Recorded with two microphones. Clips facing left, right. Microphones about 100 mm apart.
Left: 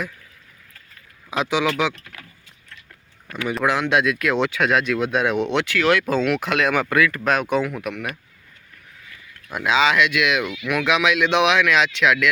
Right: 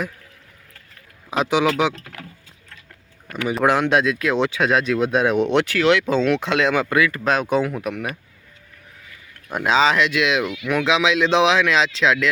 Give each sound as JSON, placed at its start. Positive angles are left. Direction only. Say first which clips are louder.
{"t": 1.3, "sound": "speech", "louder": "right 2 dB", "side_deg": -20}
{"t": 3.6, "sound": "speech", "louder": "right 2 dB", "side_deg": -40}
{"t": 5.8, "sound": "speech", "louder": "even", "side_deg": -20}
{"t": 9.6, "sound": "speech", "louder": "right 1 dB", "side_deg": -35}